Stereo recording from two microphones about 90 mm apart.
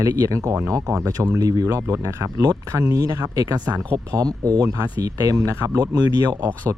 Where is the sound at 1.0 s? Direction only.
40° right (ahead or behind).